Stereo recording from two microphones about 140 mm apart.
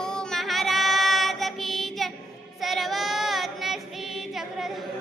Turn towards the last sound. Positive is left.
turn(degrees=-5)  # may be behind; listen again after turning